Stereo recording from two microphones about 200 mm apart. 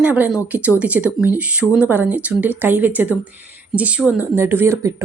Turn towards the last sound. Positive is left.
turn(degrees=-10)  # may be behind; listen again after turning